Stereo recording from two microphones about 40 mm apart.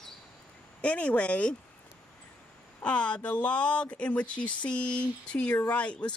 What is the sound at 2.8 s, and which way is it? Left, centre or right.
Speech, left.